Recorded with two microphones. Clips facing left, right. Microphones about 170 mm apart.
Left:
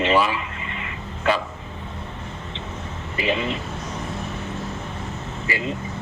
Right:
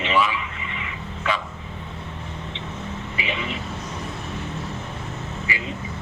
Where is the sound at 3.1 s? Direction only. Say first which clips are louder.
Left 7 dB; 40° left (ahead or behind).